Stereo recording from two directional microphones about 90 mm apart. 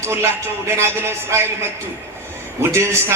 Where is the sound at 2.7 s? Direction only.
30° right (ahead or behind).